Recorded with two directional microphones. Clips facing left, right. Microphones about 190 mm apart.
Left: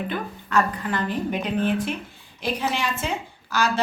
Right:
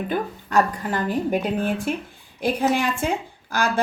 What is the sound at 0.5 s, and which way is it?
A woman's voice, 40° right (ahead or behind).